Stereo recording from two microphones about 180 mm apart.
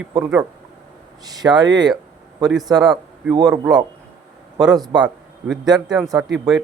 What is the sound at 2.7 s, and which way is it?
Speech, 25° right (ahead or behind).